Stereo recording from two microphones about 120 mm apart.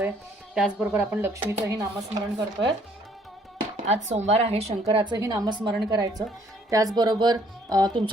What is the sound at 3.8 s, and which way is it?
A woman's voice, 70° right (ahead or behind).